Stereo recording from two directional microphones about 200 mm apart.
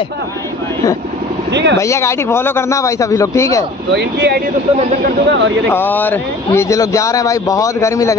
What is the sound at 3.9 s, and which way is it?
Speech, 55° right (ahead or behind).